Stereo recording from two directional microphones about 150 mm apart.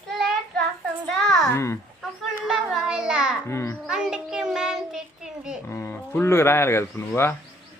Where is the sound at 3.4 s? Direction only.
15° left (ahead or behind).